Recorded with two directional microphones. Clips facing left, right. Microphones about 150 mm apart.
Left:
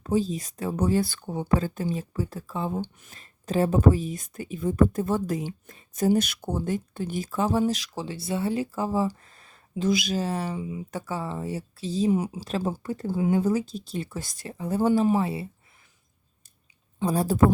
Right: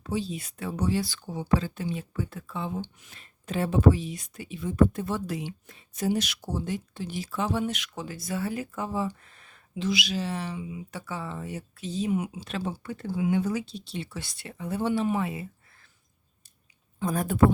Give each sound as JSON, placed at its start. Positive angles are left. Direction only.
{"t": 0.0, "sound": "speech", "side_deg": 40}
{"t": 17.0, "sound": "speech", "side_deg": 30}